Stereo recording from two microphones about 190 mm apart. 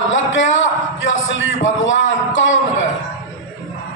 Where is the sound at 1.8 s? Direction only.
80° left.